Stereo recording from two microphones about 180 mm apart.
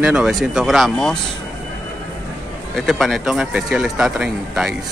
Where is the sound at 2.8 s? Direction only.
Centre (ahead or behind).